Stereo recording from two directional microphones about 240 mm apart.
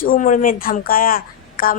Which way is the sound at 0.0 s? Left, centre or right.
Left.